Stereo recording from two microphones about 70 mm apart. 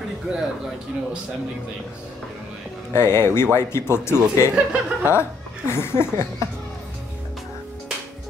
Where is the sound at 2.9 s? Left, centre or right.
Left.